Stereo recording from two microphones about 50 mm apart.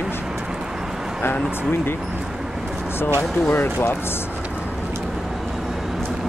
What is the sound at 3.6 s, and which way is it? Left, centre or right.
Speech, left.